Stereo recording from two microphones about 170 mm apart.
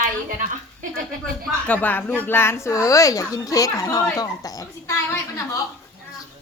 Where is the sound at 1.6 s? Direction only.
10° left (ahead or behind).